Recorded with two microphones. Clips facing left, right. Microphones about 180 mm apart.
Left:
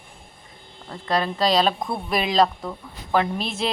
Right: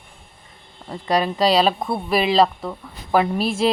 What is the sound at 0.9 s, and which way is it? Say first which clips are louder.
A woman's voice: right 3 dB; 10° right (ahead or behind).